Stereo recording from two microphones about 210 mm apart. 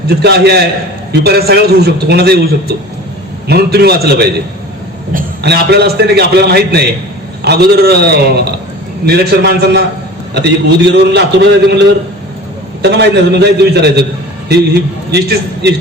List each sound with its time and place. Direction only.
0.1 s a man's voice: 50° right (ahead or behind)
10.9 s a man's voice: 55° right (ahead or behind)
12.8 s a man's voice: 50° right (ahead or behind)